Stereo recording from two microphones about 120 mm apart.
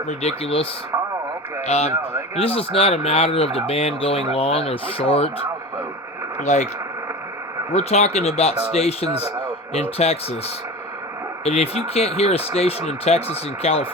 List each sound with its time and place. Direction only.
0.1 s speech: 60° left (ahead or behind)
2.3 s speech: 55° left (ahead or behind)
6.4 s speech: 70° left (ahead or behind)
7.7 s speech: 65° left (ahead or behind)
11.4 s speech: 60° left (ahead or behind)